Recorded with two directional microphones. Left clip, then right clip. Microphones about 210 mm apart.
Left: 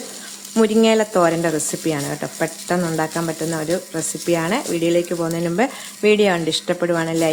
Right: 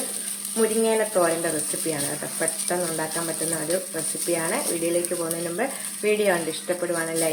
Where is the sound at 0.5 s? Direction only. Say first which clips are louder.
Left 7 dB; 50° left (ahead or behind).